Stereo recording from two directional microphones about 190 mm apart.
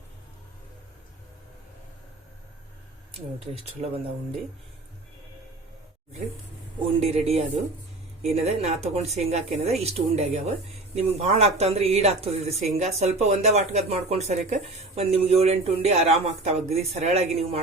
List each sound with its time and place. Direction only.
3.8 s speech: 30° right (ahead or behind)
7.0 s speech: 30° right (ahead or behind)